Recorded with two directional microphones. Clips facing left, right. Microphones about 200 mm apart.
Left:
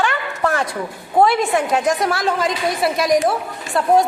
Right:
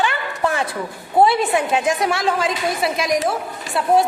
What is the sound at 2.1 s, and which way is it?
Speech, centre (ahead or behind).